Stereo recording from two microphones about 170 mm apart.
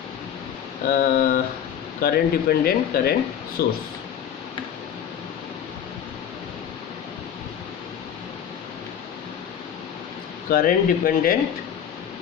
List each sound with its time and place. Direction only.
0.9 s speech: 60° left (ahead or behind)
10.5 s speech: 55° left (ahead or behind)